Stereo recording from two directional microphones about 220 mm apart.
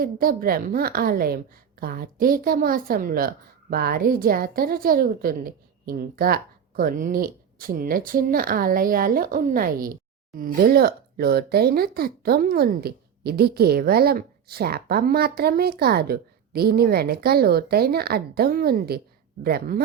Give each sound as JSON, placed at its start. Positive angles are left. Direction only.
{"t": 0.0, "sound": "a woman's voice", "side_deg": -40}